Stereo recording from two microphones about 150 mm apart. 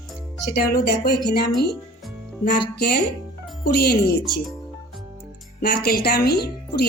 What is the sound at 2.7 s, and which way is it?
A woman's voice, 90° left.